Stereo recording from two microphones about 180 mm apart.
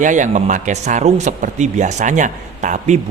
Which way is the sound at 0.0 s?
45° right (ahead or behind).